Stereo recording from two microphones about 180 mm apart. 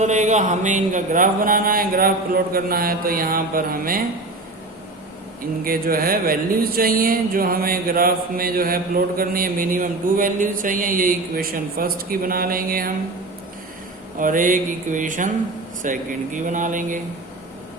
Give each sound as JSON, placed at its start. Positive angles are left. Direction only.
{"t": 0.0, "sound": "speech", "side_deg": -40}
{"t": 5.4, "sound": "speech", "side_deg": -55}
{"t": 14.2, "sound": "speech", "side_deg": -50}